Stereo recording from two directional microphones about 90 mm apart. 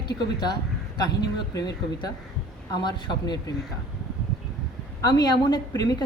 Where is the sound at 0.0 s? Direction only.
50° left (ahead or behind).